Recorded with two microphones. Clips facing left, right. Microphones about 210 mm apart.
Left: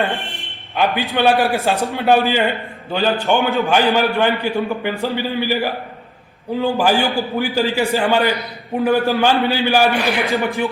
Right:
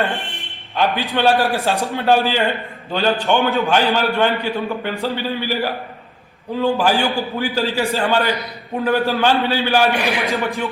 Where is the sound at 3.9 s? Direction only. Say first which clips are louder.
Left 1 dB; 10° left (ahead or behind).